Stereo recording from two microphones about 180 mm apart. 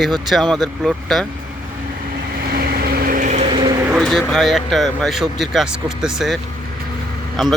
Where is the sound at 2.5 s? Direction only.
55° right (ahead or behind); by 3.5 s 40° right (ahead or behind).